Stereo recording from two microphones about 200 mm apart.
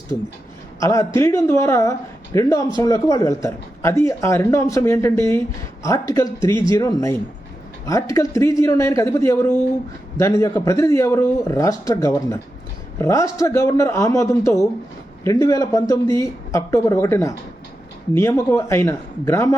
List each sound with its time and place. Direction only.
0.8 s speech: 15° left (ahead or behind)